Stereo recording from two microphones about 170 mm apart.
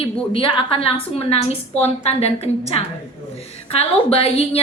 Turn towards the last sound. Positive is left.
turn(degrees=35)  # may be behind; listen again after turning